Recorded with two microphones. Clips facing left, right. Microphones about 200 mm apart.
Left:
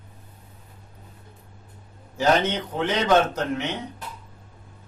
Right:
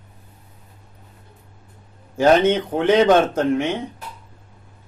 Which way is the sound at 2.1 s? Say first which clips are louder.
Right 6 dB; 50° right (ahead or behind).